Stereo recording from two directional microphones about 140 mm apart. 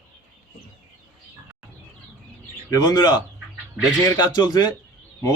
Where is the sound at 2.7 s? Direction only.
30° left (ahead or behind).